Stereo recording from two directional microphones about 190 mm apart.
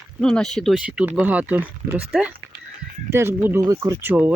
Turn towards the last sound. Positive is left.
turn(degrees=-10)  # may be behind; listen again after turning